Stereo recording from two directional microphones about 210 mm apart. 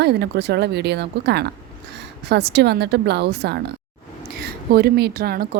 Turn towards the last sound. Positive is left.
turn(degrees=-45)  # may be behind; listen again after turning